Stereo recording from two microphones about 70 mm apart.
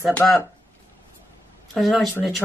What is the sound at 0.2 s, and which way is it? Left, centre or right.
Speech, left.